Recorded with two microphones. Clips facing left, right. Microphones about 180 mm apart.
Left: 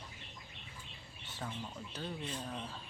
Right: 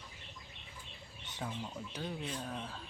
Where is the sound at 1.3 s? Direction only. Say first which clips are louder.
Right 2 dB; 15° right (ahead or behind).